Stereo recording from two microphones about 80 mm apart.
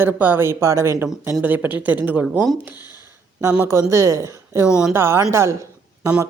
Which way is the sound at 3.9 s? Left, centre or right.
Right.